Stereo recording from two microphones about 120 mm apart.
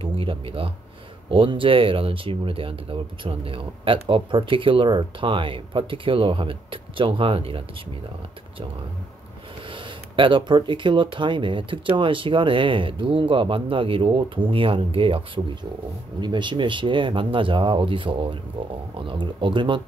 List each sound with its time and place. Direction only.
0.0 s speech: 50° right (ahead or behind)
9.7 s speech: 45° right (ahead or behind)